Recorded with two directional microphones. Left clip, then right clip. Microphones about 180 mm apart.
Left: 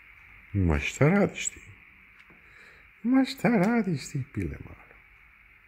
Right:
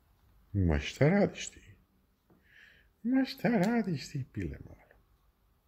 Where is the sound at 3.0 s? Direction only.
20° left (ahead or behind).